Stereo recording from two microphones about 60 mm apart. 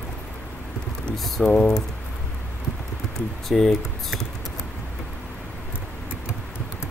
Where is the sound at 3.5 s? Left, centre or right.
Centre.